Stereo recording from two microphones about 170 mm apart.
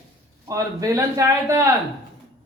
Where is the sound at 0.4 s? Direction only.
20° right (ahead or behind).